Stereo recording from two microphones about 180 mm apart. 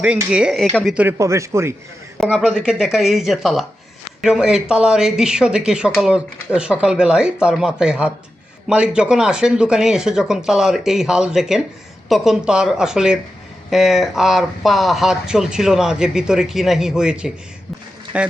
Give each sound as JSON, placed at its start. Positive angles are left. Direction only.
{"t": 0.0, "sound": "speech", "side_deg": -5}
{"t": 0.9, "sound": "a man's voice", "side_deg": -15}
{"t": 2.1, "sound": "a man's voice", "side_deg": 0}